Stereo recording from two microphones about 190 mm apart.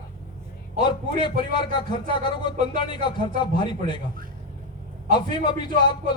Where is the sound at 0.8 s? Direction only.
25° left (ahead or behind).